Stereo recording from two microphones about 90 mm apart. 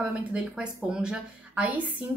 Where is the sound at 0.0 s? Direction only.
15° right (ahead or behind).